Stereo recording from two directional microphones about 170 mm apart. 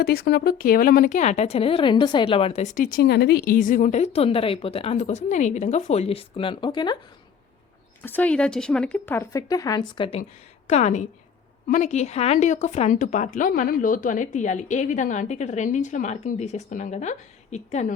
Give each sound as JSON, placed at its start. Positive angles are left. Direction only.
{"t": 0.0, "sound": "speech", "side_deg": 65}
{"t": 8.0, "sound": "a woman's voice", "side_deg": 10}
{"t": 10.7, "sound": "a woman's voice", "side_deg": 40}